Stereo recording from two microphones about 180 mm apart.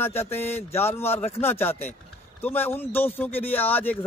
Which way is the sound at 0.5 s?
35° left (ahead or behind).